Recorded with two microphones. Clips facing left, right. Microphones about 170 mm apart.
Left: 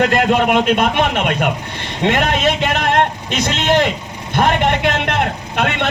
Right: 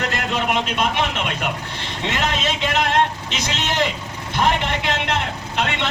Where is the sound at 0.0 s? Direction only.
55° left (ahead or behind).